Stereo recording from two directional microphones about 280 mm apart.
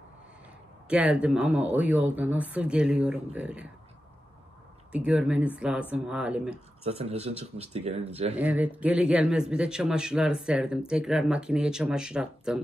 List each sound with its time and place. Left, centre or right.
0.8 s a man's voice: centre
4.9 s a man's voice: centre
6.8 s speech: right
8.4 s a man's voice: centre